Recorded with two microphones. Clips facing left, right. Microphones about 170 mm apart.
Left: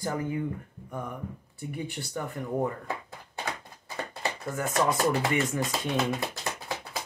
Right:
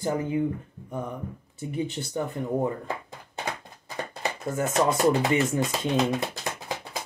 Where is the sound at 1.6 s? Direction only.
20° right (ahead or behind).